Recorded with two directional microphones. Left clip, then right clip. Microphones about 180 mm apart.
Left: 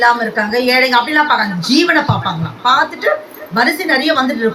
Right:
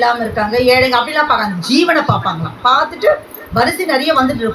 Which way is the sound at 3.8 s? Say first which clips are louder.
Even; 40° left (ahead or behind).